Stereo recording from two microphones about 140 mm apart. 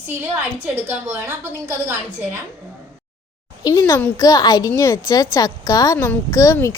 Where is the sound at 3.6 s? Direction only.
30° left (ahead or behind).